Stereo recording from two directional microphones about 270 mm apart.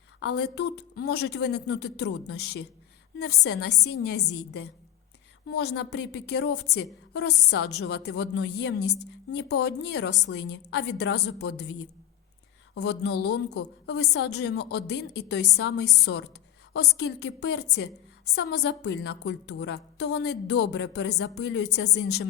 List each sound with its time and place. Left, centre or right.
0.2 s a woman's voice: left